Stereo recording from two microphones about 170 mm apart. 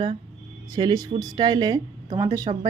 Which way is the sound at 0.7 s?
25° right (ahead or behind).